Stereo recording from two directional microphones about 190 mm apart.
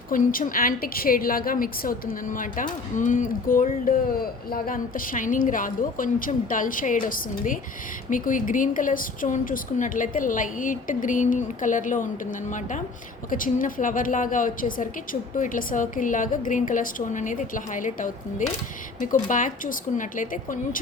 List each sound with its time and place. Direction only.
0.1 s a woman's voice: 45° left (ahead or behind)